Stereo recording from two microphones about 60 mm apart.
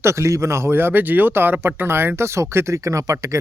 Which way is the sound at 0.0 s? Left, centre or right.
Right.